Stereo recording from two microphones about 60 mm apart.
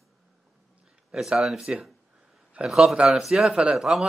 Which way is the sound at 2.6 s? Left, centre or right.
Right.